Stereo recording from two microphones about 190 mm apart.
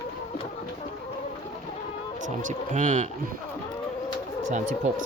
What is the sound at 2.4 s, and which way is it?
Speech, 40° right (ahead or behind).